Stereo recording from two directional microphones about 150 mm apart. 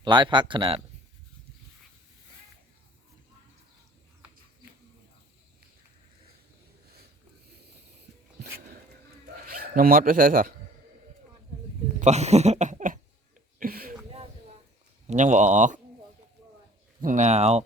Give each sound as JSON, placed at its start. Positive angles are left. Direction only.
{"t": 0.0, "sound": "speech", "side_deg": -30}
{"t": 9.5, "sound": "speech", "side_deg": -80}
{"t": 11.9, "sound": "speech", "side_deg": -50}
{"t": 13.6, "sound": "a sound", "side_deg": -75}
{"t": 15.0, "sound": "speech", "side_deg": -55}
{"t": 17.0, "sound": "speech", "side_deg": -55}